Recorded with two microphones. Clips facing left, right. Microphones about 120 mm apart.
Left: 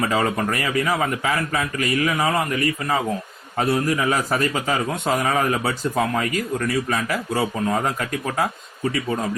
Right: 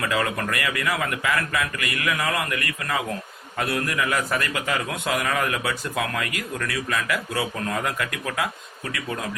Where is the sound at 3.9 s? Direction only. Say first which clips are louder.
Left 3 dB; 35° left (ahead or behind).